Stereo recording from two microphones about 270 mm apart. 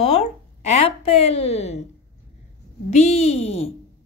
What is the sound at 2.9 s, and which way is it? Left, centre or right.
Speech, left.